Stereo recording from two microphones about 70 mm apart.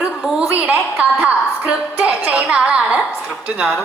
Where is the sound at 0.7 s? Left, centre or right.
Right.